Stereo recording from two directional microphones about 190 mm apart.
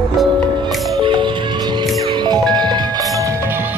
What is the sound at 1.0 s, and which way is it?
Music, 25° right (ahead or behind).